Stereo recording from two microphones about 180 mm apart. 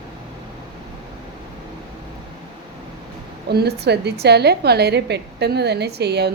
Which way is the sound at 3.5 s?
65° right (ahead or behind).